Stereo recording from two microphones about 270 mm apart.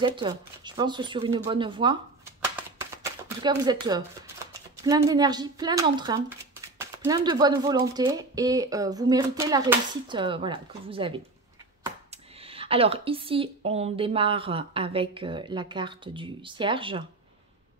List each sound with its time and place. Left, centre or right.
0.0 s speech: centre
12.4 s speech: right